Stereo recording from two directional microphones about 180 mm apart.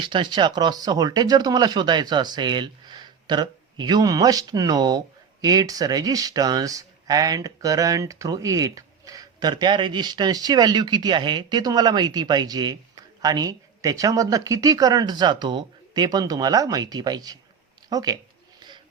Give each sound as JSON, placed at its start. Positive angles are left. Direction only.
{"t": 0.0, "sound": "speech", "side_deg": -25}